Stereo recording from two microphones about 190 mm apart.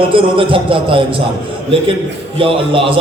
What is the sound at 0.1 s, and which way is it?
Speech, 30° right (ahead or behind).